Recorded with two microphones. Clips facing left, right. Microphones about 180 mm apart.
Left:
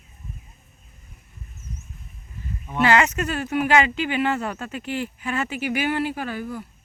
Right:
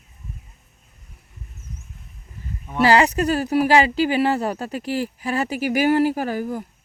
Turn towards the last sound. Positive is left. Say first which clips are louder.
# right 5 dB
turn(degrees=-40)  # may be behind; listen again after turning